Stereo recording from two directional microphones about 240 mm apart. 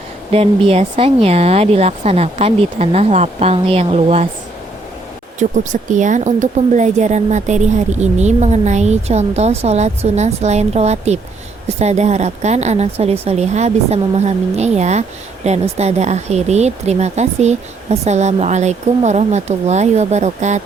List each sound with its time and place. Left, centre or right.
0.3 s speech: right
5.4 s speech: right